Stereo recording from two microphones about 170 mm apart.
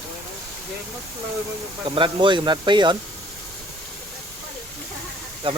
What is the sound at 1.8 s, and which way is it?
Speech, 30° right (ahead or behind).